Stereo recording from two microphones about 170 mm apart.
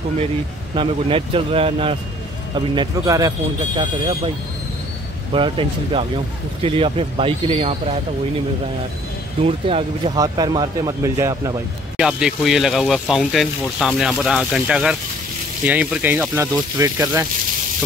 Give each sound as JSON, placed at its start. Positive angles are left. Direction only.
{"t": 0.7, "sound": "speech", "side_deg": -30}
{"t": 5.3, "sound": "speech", "side_deg": -30}
{"t": 9.4, "sound": "speech", "side_deg": -35}
{"t": 10.1, "sound": "speech", "side_deg": -20}
{"t": 12.0, "sound": "speech", "side_deg": -5}